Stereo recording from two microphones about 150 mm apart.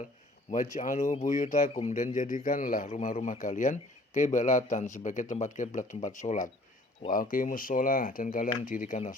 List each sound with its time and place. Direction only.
0.5 s speech: 60° left (ahead or behind)